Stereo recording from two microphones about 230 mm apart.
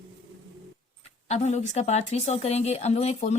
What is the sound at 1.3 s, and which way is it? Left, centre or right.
A woman's voice, left.